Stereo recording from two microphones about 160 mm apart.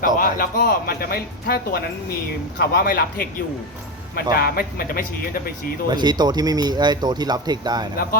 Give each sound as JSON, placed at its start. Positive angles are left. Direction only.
{"t": 0.0, "sound": "speech", "side_deg": 60}
{"t": 4.4, "sound": "speech", "side_deg": 70}
{"t": 5.9, "sound": "speech", "side_deg": -25}